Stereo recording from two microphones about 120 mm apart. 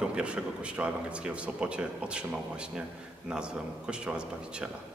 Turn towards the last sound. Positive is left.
turn(degrees=-5)  # may be behind; listen again after turning